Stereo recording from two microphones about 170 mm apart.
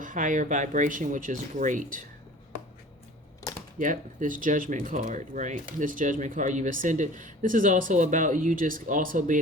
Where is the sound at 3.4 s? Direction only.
15° left (ahead or behind).